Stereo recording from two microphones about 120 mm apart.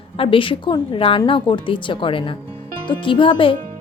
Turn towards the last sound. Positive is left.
turn(degrees=45)  # may be behind; listen again after turning